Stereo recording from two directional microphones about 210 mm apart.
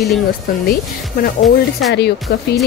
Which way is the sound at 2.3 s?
50° left (ahead or behind).